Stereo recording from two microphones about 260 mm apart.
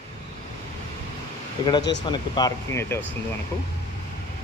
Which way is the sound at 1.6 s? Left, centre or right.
Centre.